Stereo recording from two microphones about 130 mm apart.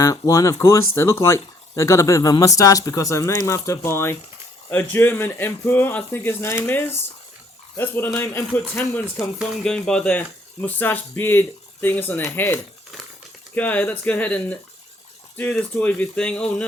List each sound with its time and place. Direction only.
0.0 s speech: 25° left (ahead or behind); by 16.6 s 10° left (ahead or behind)